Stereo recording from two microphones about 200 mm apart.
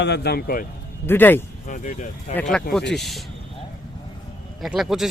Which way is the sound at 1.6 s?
40° left (ahead or behind).